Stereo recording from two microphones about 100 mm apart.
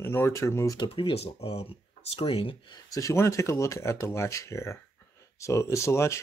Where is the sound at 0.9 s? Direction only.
70° left (ahead or behind).